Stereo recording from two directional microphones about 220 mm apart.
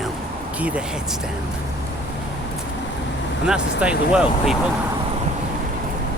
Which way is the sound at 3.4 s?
5° right (ahead or behind).